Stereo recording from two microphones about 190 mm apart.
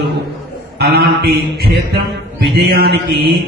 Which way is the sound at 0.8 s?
60° right (ahead or behind).